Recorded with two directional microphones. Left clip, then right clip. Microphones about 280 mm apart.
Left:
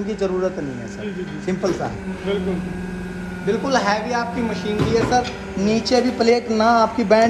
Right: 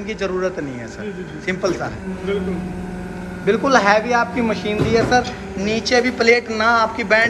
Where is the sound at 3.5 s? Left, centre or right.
Centre.